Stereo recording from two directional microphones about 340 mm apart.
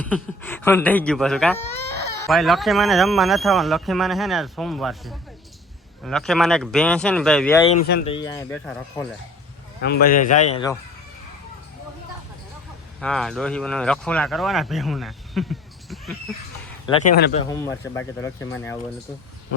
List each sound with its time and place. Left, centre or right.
0.0 s speech: centre
7.7 s a man's voice: left
8.1 s speech: centre
9.8 s a man's voice: left
13.0 s speech: centre
16.8 s a man's voice: centre
17.2 s a man's voice: left
17.5 s speech: centre